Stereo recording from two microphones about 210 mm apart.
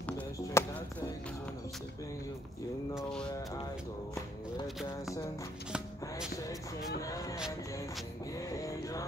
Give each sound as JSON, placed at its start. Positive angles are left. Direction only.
{"t": 0.6, "sound": "music", "side_deg": 15}
{"t": 2.9, "sound": "a sound", "side_deg": 0}
{"t": 7.0, "sound": "music", "side_deg": 15}
{"t": 8.5, "sound": "music", "side_deg": 15}